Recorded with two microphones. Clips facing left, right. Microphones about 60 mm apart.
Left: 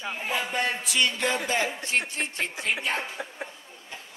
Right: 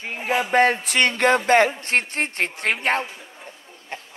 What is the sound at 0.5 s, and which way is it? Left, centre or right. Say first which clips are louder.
Speech: right 10 dB; right.